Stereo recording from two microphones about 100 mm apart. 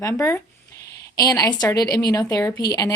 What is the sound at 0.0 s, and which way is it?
A woman's voice, 30° left (ahead or behind).